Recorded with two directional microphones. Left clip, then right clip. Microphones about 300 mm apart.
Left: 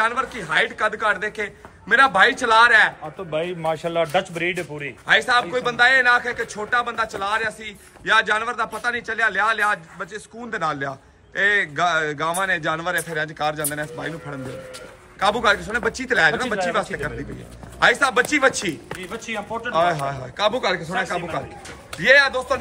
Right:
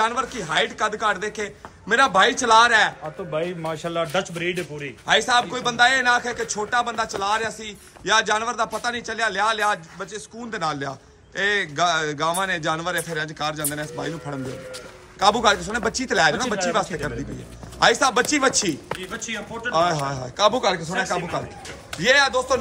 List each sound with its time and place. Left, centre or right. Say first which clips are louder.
0.0 s a man's voice: left 1 dB; centre
3.3 s speech: left 3 dB; left
5.0 s a man's voice: left 1 dB; centre
19.1 s speech: left 3 dB; centre
19.7 s a man's voice: left 1 dB; centre